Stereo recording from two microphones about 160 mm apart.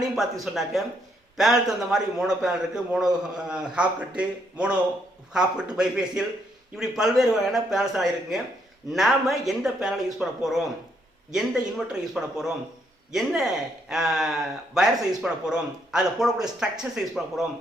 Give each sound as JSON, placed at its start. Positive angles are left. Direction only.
{"t": 0.0, "sound": "a man's voice", "side_deg": 0}